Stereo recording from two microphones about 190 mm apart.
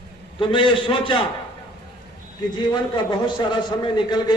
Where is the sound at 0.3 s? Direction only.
25° left (ahead or behind).